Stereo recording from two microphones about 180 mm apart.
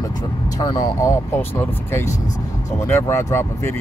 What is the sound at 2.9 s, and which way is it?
Speech, 15° left (ahead or behind).